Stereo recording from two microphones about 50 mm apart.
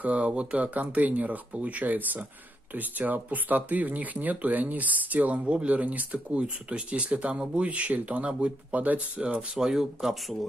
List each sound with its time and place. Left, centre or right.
0.0 s speech: right
5.4 s speech: right
5.7 s speech: right
9.6 s speech: centre